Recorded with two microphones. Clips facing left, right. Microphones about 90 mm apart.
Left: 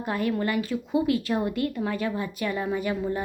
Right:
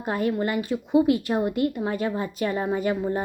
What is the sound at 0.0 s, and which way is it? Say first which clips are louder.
A woman's voice: right 2 dB; 25° right (ahead or behind).